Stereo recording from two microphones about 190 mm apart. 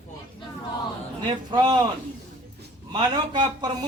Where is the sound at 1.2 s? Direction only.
25° right (ahead or behind).